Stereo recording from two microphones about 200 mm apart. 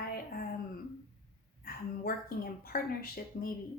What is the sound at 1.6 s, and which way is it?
A woman's voice, 50° left (ahead or behind).